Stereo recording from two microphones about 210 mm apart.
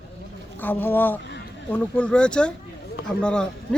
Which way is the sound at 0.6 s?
10° left (ahead or behind).